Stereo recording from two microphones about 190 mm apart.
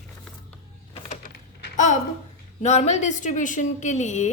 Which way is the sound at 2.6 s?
35° left (ahead or behind).